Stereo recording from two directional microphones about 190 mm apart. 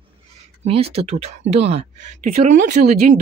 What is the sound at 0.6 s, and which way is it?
Speech, 30° right (ahead or behind).